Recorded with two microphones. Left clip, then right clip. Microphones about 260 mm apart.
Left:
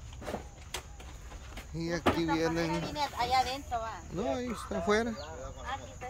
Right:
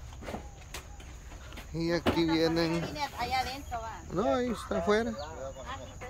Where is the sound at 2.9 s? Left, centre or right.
Left.